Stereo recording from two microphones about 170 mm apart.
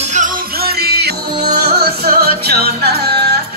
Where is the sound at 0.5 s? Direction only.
65° right (ahead or behind).